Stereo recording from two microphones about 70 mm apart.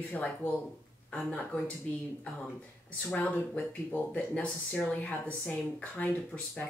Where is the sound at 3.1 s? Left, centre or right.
Left.